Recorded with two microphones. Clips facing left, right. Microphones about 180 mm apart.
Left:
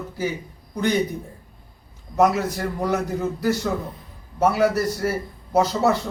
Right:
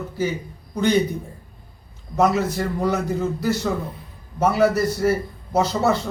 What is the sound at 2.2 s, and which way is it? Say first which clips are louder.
Speech: even; 10° left (ahead or behind).